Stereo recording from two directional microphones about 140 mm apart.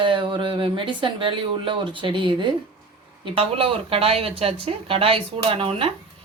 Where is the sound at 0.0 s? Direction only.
35° right (ahead or behind).